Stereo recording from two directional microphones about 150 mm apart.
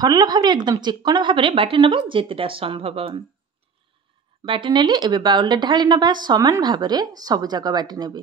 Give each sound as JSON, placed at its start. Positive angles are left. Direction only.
{"t": 0.0, "sound": "a woman's voice", "side_deg": -25}
{"t": 4.5, "sound": "speech", "side_deg": -30}